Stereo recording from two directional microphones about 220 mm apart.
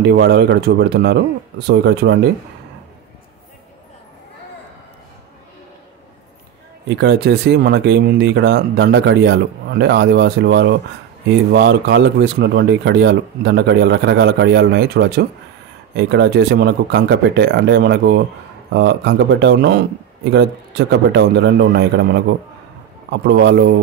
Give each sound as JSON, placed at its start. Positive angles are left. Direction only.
{"t": 0.0, "sound": "speech", "side_deg": -50}
{"t": 6.9, "sound": "speech", "side_deg": -50}
{"t": 23.2, "sound": "speech", "side_deg": -50}